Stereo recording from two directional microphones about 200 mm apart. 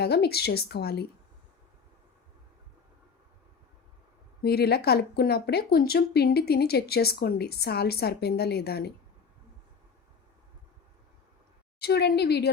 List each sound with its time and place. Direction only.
0.0 s speech: 55° left (ahead or behind)
4.4 s speech: 50° left (ahead or behind)
11.8 s a woman's voice: 55° left (ahead or behind)